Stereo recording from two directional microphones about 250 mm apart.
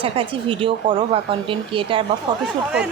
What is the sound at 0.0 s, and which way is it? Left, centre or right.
A woman's voice, right.